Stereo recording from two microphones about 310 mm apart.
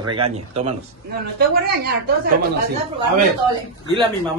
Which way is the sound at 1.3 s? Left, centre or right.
Right.